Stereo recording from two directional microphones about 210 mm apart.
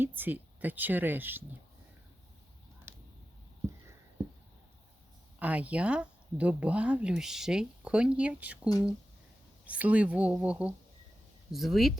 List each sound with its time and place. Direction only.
0.0 s speech: 10° right (ahead or behind)
5.4 s speech: 5° right (ahead or behind)